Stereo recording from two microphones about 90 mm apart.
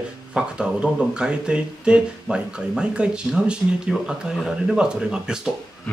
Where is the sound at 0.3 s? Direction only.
10° right (ahead or behind).